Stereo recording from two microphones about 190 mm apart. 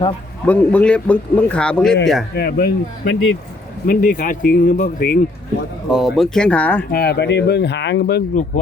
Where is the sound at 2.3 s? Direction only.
55° left (ahead or behind).